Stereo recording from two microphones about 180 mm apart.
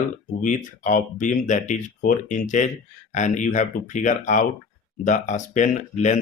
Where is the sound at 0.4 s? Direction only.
45° left (ahead or behind).